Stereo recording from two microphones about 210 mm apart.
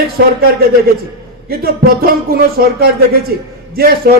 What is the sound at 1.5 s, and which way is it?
Speech, 45° right (ahead or behind).